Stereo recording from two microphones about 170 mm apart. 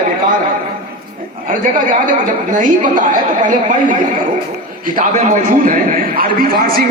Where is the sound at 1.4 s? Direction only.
50° right (ahead or behind).